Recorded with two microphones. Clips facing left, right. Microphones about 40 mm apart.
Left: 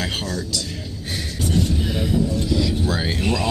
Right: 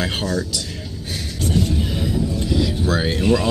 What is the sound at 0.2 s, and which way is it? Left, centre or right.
Speech, right.